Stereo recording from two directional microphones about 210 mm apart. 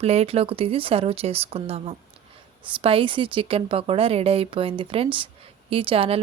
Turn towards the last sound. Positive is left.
turn(degrees=-25)  # may be behind; listen again after turning